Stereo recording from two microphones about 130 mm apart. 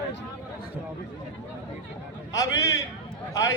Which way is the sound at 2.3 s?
25° left (ahead or behind).